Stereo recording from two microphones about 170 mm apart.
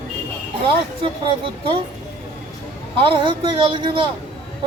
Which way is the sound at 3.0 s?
30° right (ahead or behind).